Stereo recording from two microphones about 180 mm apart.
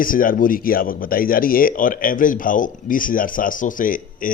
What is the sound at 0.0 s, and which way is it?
Speech, 50° left (ahead or behind).